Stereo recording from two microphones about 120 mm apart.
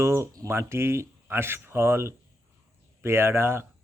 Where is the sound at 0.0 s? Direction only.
20° right (ahead or behind).